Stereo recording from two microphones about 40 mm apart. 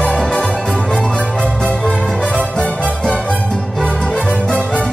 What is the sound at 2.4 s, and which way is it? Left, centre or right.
Music, left.